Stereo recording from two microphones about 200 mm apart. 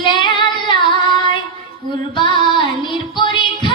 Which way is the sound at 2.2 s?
25° left (ahead or behind).